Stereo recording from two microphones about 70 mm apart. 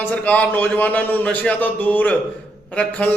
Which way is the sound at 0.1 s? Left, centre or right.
Left.